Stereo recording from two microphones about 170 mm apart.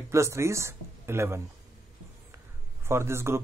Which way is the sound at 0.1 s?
15° right (ahead or behind).